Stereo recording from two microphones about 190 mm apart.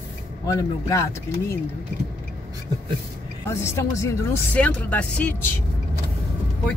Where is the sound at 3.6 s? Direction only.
15° left (ahead or behind).